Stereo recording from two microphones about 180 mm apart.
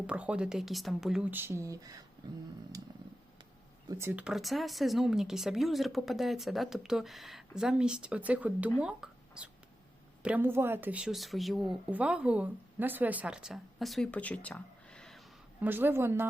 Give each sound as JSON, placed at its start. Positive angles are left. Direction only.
{"t": 0.1, "sound": "speech", "side_deg": -5}
{"t": 3.8, "sound": "a woman's voice", "side_deg": -15}
{"t": 15.6, "sound": "speech", "side_deg": -10}